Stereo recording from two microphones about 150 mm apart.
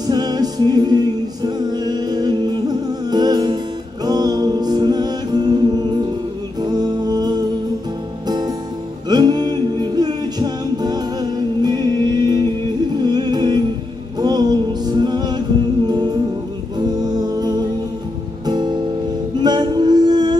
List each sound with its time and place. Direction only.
0.0 s music: 25° right (ahead or behind)
4.0 s a capella: 25° right (ahead or behind)
6.6 s music: 25° right (ahead or behind)
9.1 s music: 30° right (ahead or behind)
16.7 s a capella: 25° right (ahead or behind)
18.4 s music: 30° right (ahead or behind)